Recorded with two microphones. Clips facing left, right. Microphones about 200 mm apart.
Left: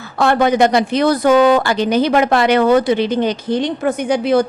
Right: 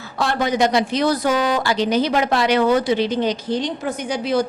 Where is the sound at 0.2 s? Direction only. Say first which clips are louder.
Left 6 dB; 55° left (ahead or behind).